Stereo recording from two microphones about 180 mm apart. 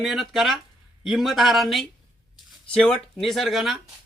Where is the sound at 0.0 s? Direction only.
Centre (ahead or behind).